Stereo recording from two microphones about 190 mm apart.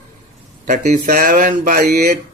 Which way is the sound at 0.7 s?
40° right (ahead or behind).